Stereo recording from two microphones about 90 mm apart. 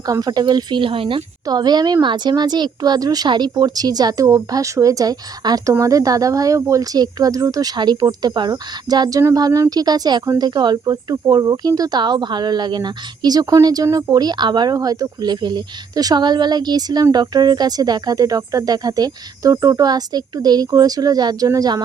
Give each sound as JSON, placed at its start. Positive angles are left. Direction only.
{"t": 0.0, "sound": "speech", "side_deg": -45}
{"t": 1.5, "sound": "speech", "side_deg": -50}